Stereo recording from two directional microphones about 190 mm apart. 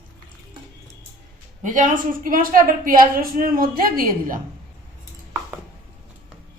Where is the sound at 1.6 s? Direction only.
45° right (ahead or behind).